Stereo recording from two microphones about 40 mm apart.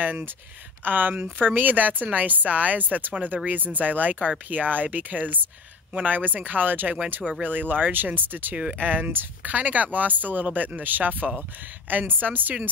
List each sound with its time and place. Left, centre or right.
0.0 s speech: right
1.1 s speech: right
9.4 s speech: right